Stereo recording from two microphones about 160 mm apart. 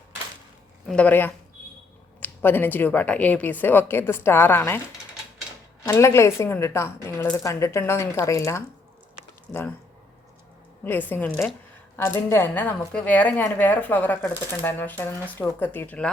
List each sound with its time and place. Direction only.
0.9 s a woman's voice: 10° left (ahead or behind)
5.8 s a woman's voice: 15° left (ahead or behind)
10.8 s a woman's voice: 10° left (ahead or behind)